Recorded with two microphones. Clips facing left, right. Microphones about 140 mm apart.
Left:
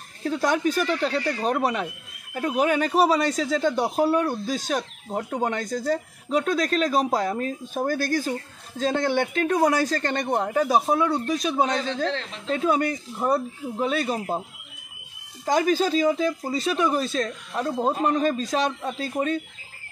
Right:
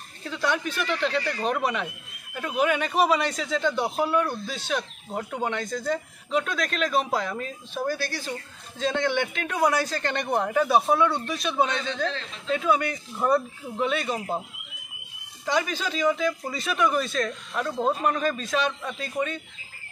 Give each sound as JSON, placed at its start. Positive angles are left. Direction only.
{"t": 0.2, "sound": "a man's voice", "side_deg": 40}
{"t": 12.9, "sound": "speech", "side_deg": 20}
{"t": 13.7, "sound": "a man's voice", "side_deg": 35}
{"t": 15.4, "sound": "a man's voice", "side_deg": 45}